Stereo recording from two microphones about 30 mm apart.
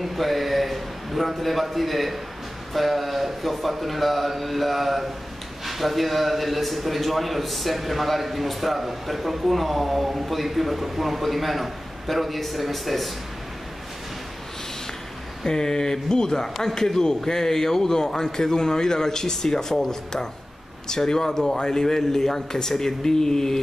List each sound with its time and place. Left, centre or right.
0.0 s a sound: centre
2.7 s a man's voice: centre
15.4 s a man's voice: left